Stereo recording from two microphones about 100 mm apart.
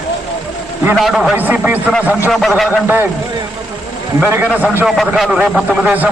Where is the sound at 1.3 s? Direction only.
15° right (ahead or behind).